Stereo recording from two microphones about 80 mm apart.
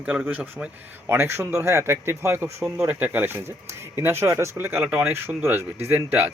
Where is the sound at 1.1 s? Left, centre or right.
Right.